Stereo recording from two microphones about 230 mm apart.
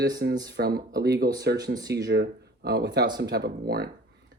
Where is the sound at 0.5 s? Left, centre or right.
Right.